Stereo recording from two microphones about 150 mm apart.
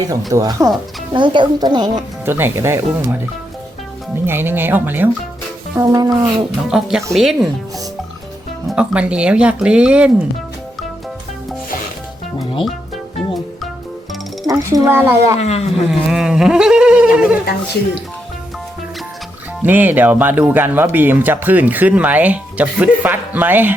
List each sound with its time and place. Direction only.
0.3 s speech: 25° right (ahead or behind)
2.2 s speech: 15° right (ahead or behind)
5.7 s speech: 25° right (ahead or behind)
6.7 s a sound: 5° right (ahead or behind)
8.6 s speech: 5° right (ahead or behind)
13.1 s music: centre (ahead or behind)
14.4 s speech: 20° right (ahead or behind)
15.4 s speech: 45° left (ahead or behind)
15.7 s a sound: 5° right (ahead or behind)
17.2 s speech: 5° right (ahead or behind)
19.6 s speech: 10° right (ahead or behind)